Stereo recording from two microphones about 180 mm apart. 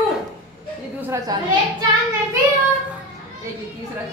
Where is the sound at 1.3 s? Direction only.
20° right (ahead or behind).